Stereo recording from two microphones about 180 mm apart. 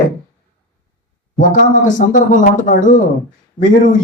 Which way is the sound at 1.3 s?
45° left (ahead or behind).